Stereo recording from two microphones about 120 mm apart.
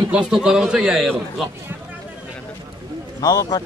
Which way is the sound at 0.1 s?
10° right (ahead or behind).